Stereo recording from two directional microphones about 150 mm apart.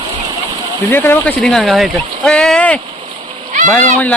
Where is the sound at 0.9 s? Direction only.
15° left (ahead or behind).